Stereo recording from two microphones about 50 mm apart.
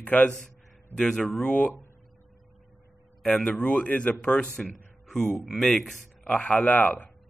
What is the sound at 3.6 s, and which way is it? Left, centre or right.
Speech, left.